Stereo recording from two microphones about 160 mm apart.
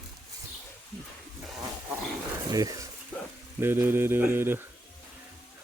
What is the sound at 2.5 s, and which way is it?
Speech, 20° right (ahead or behind).